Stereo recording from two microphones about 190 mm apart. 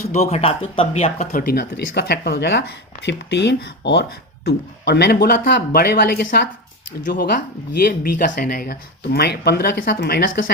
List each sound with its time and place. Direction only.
0.1 s speech: 35° left (ahead or behind); by 10.5 s 60° left (ahead or behind)